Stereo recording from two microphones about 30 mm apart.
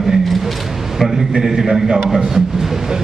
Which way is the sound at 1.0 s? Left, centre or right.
Centre.